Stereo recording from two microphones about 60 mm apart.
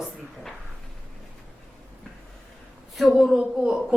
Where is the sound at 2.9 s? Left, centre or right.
Centre.